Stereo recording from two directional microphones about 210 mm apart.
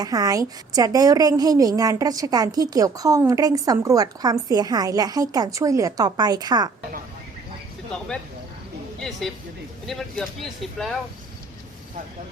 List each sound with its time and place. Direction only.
0.0 s a woman's voice: 20° right (ahead or behind)
9.0 s speech: centre (ahead or behind)